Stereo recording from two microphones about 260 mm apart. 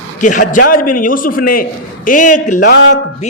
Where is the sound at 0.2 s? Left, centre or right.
Left.